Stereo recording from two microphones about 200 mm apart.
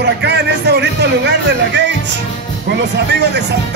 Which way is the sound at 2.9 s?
60° right (ahead or behind).